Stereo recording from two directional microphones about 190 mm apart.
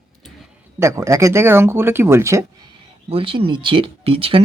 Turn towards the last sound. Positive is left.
turn(degrees=-30)  # may be behind; listen again after turning